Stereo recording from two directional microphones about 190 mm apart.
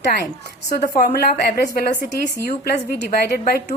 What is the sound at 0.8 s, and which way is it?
A woman's voice, 45° left (ahead or behind).